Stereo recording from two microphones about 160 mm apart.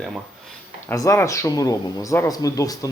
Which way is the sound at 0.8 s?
20° left (ahead or behind).